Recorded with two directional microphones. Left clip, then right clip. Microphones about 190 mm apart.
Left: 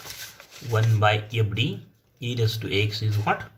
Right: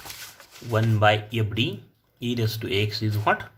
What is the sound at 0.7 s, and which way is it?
Speech, 45° right (ahead or behind).